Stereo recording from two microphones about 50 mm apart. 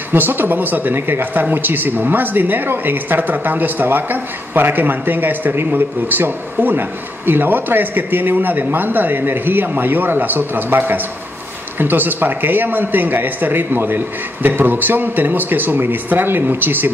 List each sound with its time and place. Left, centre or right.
0.1 s speech: right